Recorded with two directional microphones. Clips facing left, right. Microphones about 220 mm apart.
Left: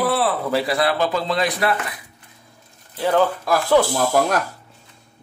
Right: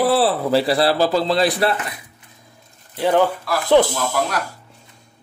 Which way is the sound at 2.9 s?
20° right (ahead or behind).